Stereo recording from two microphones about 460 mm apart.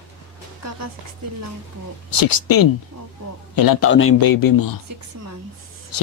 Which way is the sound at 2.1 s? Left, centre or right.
Left.